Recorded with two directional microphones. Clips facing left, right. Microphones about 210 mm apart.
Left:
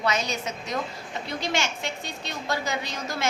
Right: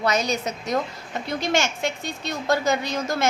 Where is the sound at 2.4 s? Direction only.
45° right (ahead or behind).